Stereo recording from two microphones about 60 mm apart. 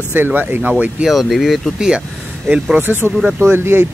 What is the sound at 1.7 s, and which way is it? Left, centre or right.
Speech, centre.